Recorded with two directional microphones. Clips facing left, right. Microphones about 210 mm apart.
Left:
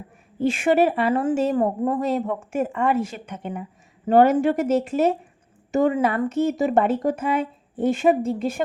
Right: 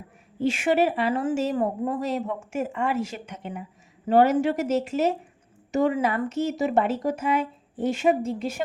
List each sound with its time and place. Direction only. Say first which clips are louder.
0.3 s a woman's voice: left 3 dB; 50° left (ahead or behind)